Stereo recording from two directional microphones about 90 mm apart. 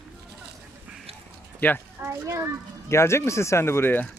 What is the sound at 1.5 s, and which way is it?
Speech, 20° left (ahead or behind).